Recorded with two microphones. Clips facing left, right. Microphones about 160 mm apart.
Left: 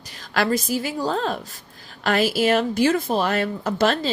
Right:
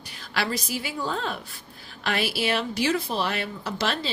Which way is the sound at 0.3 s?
45° left (ahead or behind).